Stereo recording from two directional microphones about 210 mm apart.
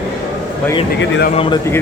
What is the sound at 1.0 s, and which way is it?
Speech, 55° left (ahead or behind).